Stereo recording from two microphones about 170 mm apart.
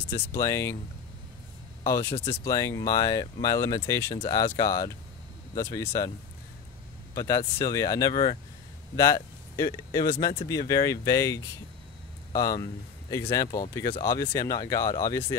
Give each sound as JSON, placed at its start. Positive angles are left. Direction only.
{"t": 0.1, "sound": "speech", "side_deg": 20}
{"t": 1.9, "sound": "speech", "side_deg": 15}
{"t": 7.2, "sound": "speech", "side_deg": 20}